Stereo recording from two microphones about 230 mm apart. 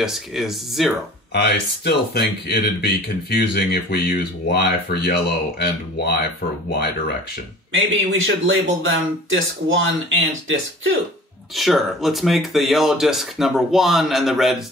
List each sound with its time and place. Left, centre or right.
0.0 s speech: centre
1.3 s speech: left
7.7 s speech: right
11.5 s speech: centre